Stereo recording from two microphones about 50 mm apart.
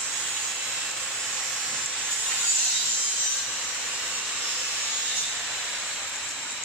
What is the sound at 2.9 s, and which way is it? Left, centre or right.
Sawing, right.